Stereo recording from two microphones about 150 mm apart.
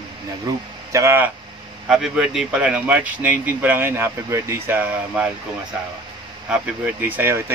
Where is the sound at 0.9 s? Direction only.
15° right (ahead or behind).